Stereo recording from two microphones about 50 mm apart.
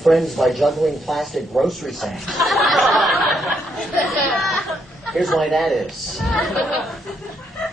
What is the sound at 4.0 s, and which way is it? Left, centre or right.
Chatter, centre.